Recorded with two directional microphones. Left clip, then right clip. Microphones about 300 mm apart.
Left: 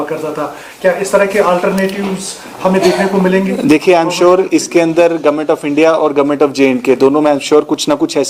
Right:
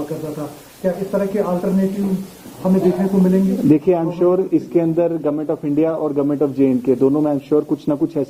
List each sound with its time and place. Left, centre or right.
0.9 s speech: centre
5.9 s speech: centre